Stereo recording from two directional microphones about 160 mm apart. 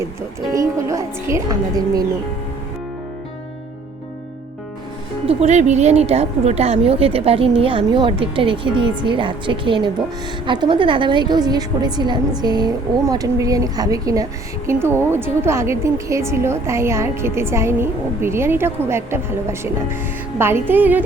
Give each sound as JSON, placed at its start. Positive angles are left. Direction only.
{"t": 0.0, "sound": "music", "side_deg": -20}
{"t": 5.2, "sound": "a woman's voice", "side_deg": -40}